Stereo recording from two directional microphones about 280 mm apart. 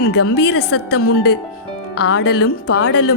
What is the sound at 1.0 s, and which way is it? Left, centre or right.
Speech, left.